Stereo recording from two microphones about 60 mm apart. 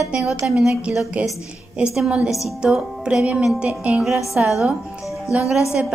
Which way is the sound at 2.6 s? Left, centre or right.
Centre.